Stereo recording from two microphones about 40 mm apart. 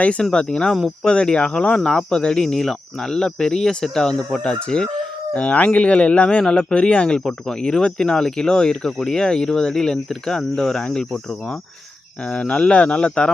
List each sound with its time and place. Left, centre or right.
0.2 s speech: centre
5.3 s speech: left; by 11.2 s centre
12.3 s speech: left